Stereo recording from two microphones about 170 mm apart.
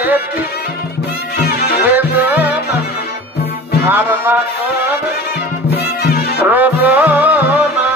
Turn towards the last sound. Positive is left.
turn(degrees=-10)  # may be behind; listen again after turning